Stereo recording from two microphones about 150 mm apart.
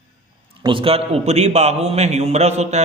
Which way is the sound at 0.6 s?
35° right (ahead or behind).